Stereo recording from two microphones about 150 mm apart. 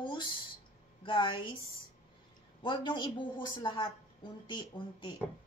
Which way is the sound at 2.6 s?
30° left (ahead or behind).